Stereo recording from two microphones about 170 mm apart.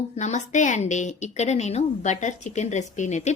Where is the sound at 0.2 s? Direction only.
45° left (ahead or behind).